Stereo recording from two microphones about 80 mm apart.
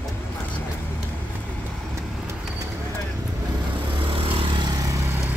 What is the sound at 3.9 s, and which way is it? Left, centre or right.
Vehicle, right.